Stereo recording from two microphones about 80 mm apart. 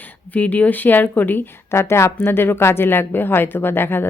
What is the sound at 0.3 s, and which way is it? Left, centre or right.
A woman's voice, centre.